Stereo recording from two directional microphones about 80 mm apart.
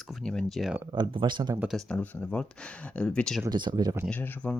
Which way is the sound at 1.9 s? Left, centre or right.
Centre.